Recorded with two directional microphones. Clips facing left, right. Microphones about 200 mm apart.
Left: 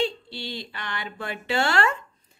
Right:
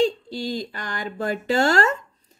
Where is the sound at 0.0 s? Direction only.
45° right (ahead or behind).